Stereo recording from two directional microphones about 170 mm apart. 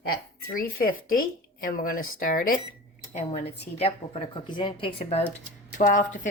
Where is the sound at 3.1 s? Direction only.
40° left (ahead or behind).